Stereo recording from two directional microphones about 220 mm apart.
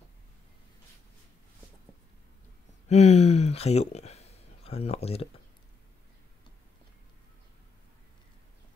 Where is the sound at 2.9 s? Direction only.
30° left (ahead or behind).